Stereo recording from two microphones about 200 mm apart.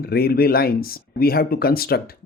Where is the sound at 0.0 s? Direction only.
50° left (ahead or behind).